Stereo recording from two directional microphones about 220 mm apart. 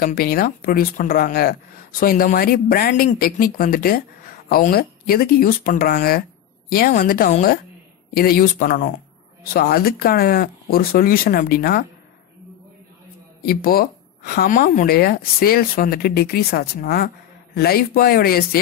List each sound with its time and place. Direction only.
0.0 s speech: 40° left (ahead or behind)
13.5 s speech: 40° left (ahead or behind)